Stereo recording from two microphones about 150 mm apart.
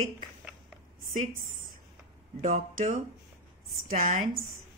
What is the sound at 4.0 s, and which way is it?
Speech, 65° right (ahead or behind).